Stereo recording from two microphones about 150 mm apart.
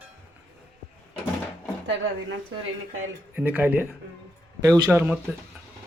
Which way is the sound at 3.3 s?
10° right (ahead or behind).